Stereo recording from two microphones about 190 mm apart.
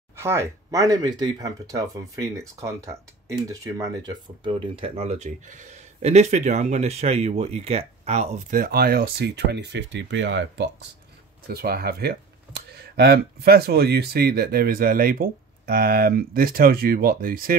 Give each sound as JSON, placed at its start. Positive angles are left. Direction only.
{"t": 0.1, "sound": "speech", "side_deg": -15}
{"t": 11.4, "sound": "speech", "side_deg": -55}